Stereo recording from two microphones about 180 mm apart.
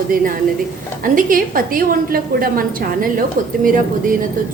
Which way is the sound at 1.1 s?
50° right (ahead or behind).